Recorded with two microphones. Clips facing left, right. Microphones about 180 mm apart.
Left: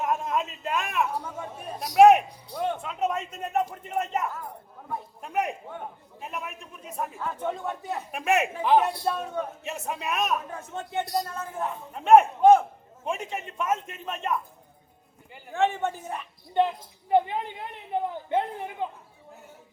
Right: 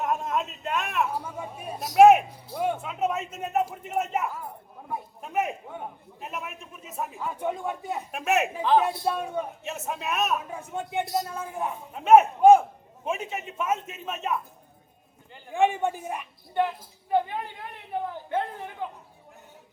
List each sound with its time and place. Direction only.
0.0 s a man's voice: centre (ahead or behind)
8.1 s a man's voice: centre (ahead or behind)
15.5 s a man's voice: 15° right (ahead or behind)
16.6 s speech: 20° left (ahead or behind)